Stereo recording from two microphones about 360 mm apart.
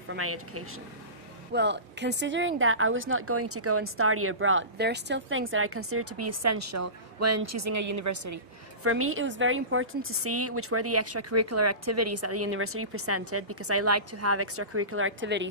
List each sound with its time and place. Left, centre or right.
0.1 s speech: right
8.8 s speech: right